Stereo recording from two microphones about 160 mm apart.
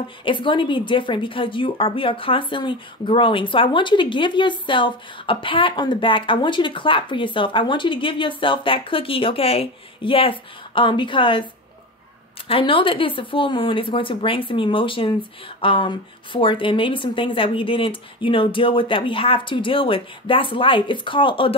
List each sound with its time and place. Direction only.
0.2 s a woman's voice: 30° left (ahead or behind)
12.4 s a woman's voice: 35° left (ahead or behind)